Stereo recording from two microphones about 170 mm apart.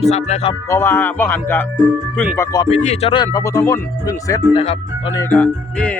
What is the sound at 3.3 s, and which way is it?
Speech, 20° left (ahead or behind).